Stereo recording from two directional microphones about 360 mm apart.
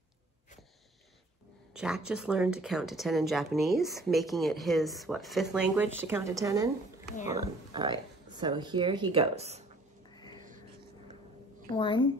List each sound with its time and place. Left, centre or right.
1.7 s speech: centre
7.1 s speech: left
7.3 s speech: centre
10.1 s a sound: centre
11.7 s a woman's voice: centre